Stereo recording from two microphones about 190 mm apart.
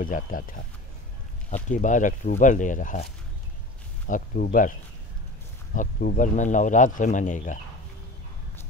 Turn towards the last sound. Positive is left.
turn(degrees=40)  # may be behind; listen again after turning